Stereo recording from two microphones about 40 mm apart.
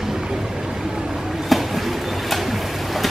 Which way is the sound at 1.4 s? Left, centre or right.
Centre.